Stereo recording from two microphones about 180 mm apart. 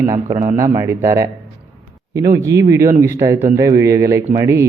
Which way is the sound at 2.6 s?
15° right (ahead or behind).